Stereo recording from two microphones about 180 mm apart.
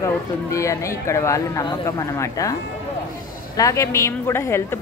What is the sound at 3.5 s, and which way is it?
A woman's voice, 15° left (ahead or behind).